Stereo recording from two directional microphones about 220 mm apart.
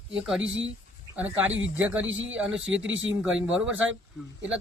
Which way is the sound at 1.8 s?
5° right (ahead or behind).